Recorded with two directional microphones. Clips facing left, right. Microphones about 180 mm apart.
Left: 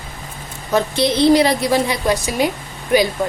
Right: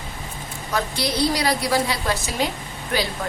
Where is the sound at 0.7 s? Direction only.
25° left (ahead or behind).